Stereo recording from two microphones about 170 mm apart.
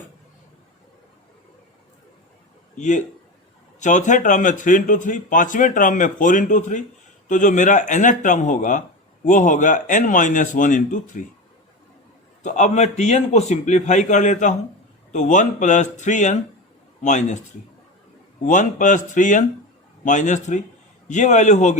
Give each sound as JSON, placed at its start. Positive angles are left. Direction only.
{"t": 2.7, "sound": "a man's voice", "side_deg": 45}
{"t": 12.4, "sound": "a man's voice", "side_deg": 45}
{"t": 18.4, "sound": "a man's voice", "side_deg": 45}